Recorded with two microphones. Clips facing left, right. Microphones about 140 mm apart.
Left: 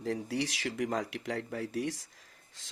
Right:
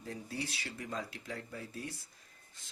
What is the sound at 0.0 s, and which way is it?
Speech, 90° left.